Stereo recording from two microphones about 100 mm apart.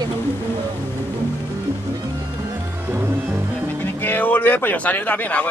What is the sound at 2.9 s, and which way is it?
Music, 25° right (ahead or behind).